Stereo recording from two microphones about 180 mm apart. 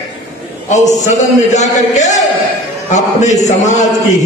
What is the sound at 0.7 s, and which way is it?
A man's voice, 40° left (ahead or behind).